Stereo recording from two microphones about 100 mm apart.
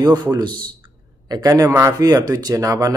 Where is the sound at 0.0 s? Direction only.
40° right (ahead or behind).